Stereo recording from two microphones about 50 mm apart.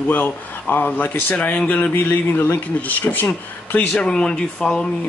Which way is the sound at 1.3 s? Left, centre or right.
Left.